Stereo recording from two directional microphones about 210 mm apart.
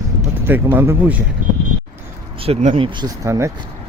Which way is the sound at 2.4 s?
30° right (ahead or behind).